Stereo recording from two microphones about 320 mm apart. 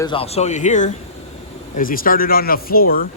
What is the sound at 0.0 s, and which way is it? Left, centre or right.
Speech, centre.